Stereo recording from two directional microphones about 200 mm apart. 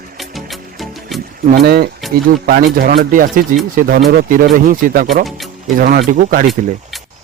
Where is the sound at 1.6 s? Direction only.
55° right (ahead or behind).